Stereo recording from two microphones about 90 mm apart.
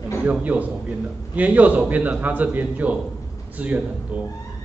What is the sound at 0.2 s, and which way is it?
A man's voice, 15° right (ahead or behind).